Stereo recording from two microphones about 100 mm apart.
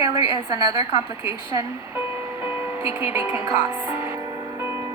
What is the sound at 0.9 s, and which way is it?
Speech, 30° right (ahead or behind).